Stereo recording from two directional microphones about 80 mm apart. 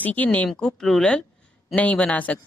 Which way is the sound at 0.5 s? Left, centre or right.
Centre.